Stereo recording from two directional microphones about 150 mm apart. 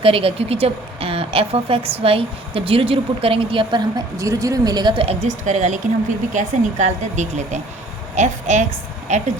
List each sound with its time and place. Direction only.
0.0 s speech: 40° right (ahead or behind)